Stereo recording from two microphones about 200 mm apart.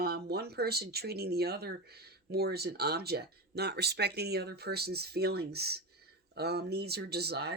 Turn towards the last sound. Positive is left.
turn(degrees=-55)  # may be behind; listen again after turning